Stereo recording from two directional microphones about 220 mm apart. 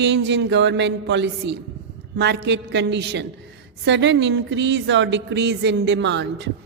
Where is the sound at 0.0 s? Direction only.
55° right (ahead or behind).